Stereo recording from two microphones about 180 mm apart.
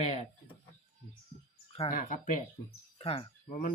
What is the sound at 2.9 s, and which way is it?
Speech, 30° left (ahead or behind).